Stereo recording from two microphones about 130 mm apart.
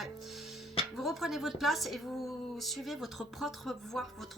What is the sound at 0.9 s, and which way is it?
Speech, centre (ahead or behind).